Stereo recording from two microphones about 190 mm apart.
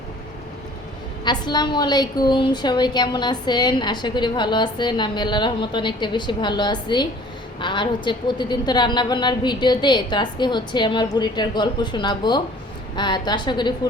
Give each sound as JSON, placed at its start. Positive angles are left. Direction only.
{"t": 1.2, "sound": "a woman's voice", "side_deg": 25}